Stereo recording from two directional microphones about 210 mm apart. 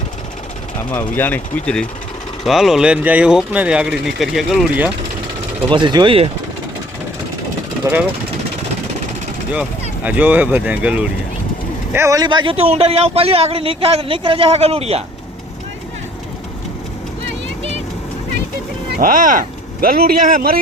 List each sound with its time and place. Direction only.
0.8 s speech: 10° left (ahead or behind)
5.6 s speech: 20° right (ahead or behind)
9.5 s speech: 5° right (ahead or behind); by 15.0 s 30° right (ahead or behind)
18.9 s speech: 40° right (ahead or behind)